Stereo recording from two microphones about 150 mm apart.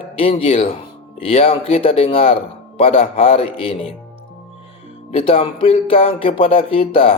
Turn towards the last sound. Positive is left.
turn(degrees=40)  # may be behind; listen again after turning